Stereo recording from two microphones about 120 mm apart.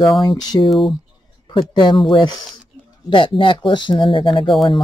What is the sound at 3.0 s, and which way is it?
Speech, 45° left (ahead or behind).